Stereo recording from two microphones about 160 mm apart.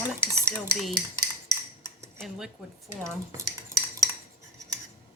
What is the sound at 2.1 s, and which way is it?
Speech, centre (ahead or behind).